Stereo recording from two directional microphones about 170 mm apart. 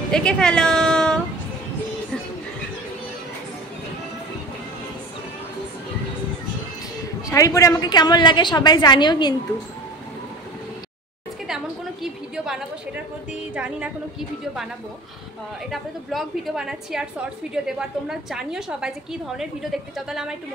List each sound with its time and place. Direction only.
0.1 s a woman's voice: 5° left (ahead or behind)
7.2 s a woman's voice: 20° left (ahead or behind)
11.4 s a sound: 5° right (ahead or behind)
15.7 s a woman's voice: centre (ahead or behind)